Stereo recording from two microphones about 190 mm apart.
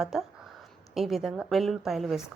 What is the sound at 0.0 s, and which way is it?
A woman's voice, centre (ahead or behind).